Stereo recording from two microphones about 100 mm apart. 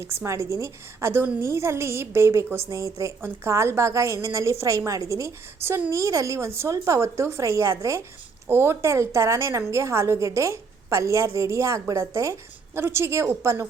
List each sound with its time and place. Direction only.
0.0 s a woman's voice: 25° right (ahead or behind)